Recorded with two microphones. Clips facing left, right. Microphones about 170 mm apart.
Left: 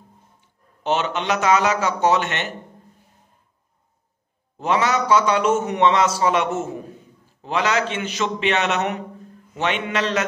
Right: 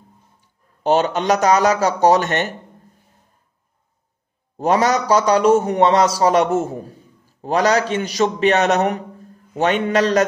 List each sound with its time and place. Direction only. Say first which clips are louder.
0.8 s a man's voice: right 6 dB; 40° right (ahead or behind)
4.6 s a man's voice: right 4 dB; 40° right (ahead or behind)